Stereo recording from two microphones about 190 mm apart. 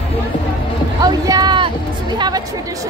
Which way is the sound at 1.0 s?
20° right (ahead or behind).